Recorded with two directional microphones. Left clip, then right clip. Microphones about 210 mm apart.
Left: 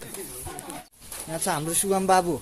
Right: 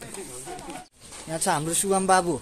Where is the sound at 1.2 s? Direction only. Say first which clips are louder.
Right 2 dB; 20° right (ahead or behind).